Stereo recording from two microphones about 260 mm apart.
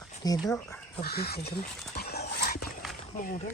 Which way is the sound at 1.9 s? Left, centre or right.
Left.